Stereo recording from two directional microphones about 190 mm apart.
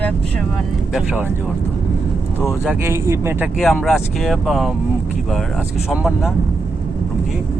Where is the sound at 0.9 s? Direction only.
5° right (ahead or behind).